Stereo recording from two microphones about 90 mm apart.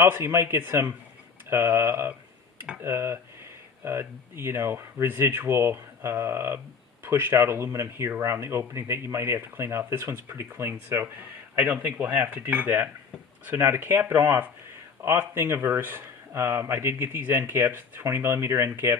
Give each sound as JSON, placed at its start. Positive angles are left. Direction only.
{"t": 0.0, "sound": "speech", "side_deg": -30}